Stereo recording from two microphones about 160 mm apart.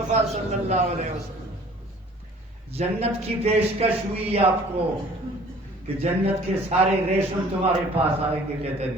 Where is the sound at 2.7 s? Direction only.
40° right (ahead or behind).